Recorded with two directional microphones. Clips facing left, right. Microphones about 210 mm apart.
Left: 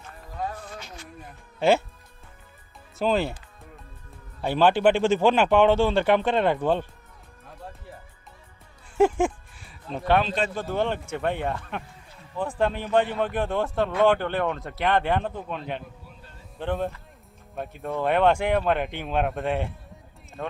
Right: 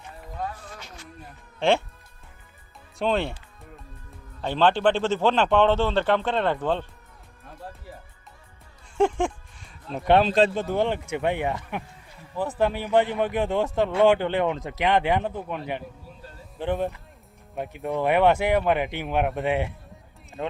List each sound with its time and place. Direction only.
1.5 s speech: 5° left (ahead or behind)
3.0 s speech: centre (ahead or behind)
4.4 s a man's voice: 10° left (ahead or behind)
9.0 s music: 5° left (ahead or behind)
10.5 s speech: 20° right (ahead or behind)